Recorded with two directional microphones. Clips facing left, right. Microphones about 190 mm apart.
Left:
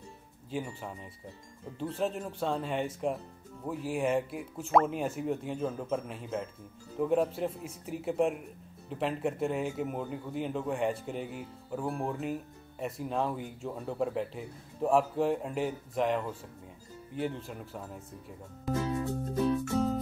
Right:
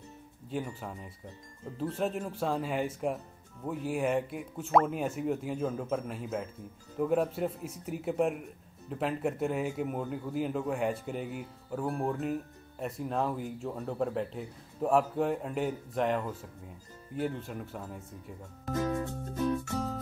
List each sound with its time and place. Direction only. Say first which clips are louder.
0.5 s speech: right 1 dB; centre (ahead or behind)